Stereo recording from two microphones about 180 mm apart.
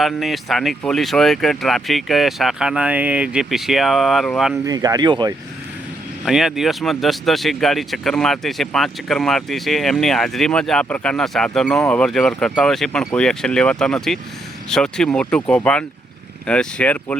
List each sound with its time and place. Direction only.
0.0 s speech: centre (ahead or behind)
4.6 s speech: 20° right (ahead or behind)
6.2 s speech: centre (ahead or behind)